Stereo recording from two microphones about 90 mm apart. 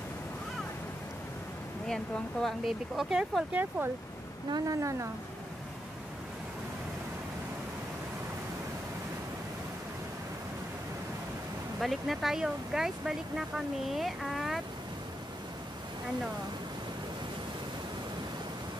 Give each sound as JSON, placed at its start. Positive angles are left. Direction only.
{"t": 2.4, "sound": "speech", "side_deg": 0}
{"t": 3.5, "sound": "speech", "side_deg": -20}
{"t": 4.5, "sound": "speech", "side_deg": -45}
{"t": 11.8, "sound": "speech", "side_deg": 0}